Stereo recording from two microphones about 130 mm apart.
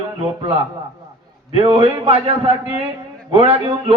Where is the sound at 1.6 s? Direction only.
45° right (ahead or behind).